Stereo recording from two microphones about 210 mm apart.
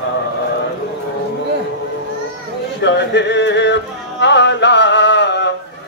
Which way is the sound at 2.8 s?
55° left (ahead or behind).